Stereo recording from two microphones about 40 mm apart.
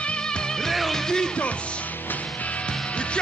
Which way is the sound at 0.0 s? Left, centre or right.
Left.